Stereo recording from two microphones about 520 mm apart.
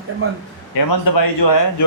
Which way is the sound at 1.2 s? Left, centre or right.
Left.